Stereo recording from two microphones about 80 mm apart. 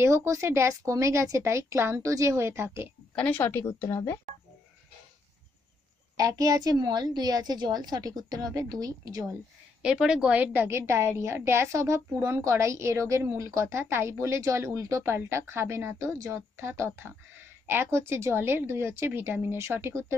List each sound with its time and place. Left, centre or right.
0.0 s a woman's voice: right
3.2 s a woman's voice: centre
6.1 s a woman's voice: right
9.8 s a woman's voice: centre; by 20.2 s right